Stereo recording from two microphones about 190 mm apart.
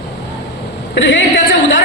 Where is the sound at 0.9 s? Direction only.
75° left (ahead or behind).